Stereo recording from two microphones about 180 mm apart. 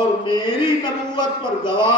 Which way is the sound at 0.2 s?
25° left (ahead or behind).